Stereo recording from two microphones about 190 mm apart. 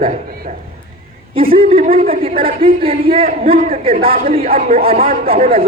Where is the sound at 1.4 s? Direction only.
30° right (ahead or behind).